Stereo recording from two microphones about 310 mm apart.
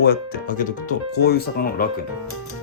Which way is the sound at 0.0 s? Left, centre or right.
Left.